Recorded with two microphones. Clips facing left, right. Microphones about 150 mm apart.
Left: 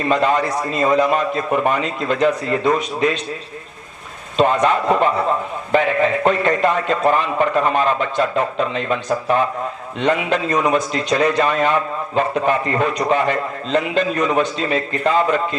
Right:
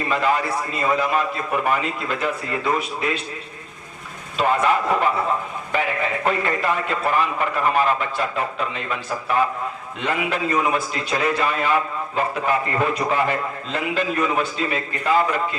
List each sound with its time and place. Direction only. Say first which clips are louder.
0.1 s a man's voice: left 4 dB; 25° left (ahead or behind)
4.4 s a man's voice: left 4 dB; 20° left (ahead or behind)
6.2 s a man's voice: left 2 dB; 25° left (ahead or behind)